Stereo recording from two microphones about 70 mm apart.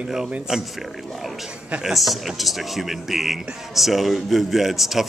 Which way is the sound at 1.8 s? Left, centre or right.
Centre.